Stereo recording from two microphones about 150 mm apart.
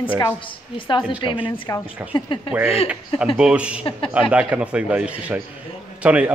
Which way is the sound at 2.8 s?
5° right (ahead or behind).